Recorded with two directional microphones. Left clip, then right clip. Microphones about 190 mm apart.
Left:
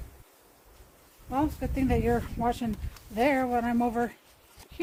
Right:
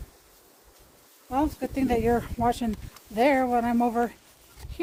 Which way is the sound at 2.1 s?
35° right (ahead or behind).